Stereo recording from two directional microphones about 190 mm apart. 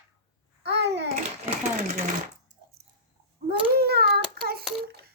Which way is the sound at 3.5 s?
55° right (ahead or behind).